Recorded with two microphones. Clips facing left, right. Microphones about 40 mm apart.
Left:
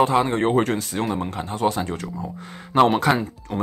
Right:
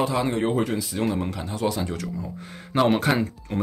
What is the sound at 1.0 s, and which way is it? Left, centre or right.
Speech, centre.